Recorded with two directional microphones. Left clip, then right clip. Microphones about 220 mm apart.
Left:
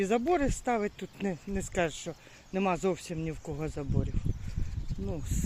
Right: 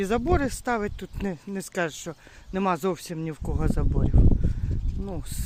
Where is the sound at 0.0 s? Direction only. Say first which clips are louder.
Right 3 dB; 15° right (ahead or behind).